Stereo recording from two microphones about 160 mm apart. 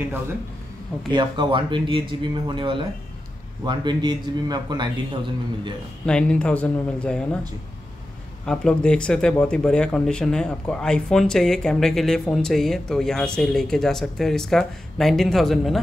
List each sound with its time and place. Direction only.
1.1 s a man's voice: 30° right (ahead or behind)
6.0 s speech: 5° left (ahead or behind)
8.5 s speech: 5° left (ahead or behind)